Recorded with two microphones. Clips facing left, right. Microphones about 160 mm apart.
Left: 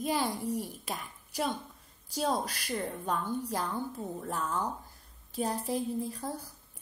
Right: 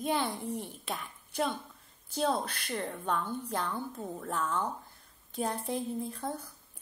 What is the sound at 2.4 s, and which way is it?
A woman's voice, 5° left (ahead or behind).